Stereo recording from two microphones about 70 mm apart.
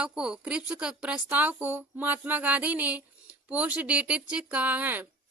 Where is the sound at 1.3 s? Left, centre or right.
Right.